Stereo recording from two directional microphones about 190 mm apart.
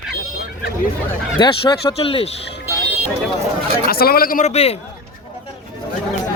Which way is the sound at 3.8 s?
50° left (ahead or behind).